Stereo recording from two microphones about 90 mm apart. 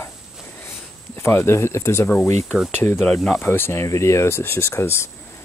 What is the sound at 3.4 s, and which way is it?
Speech, 25° left (ahead or behind).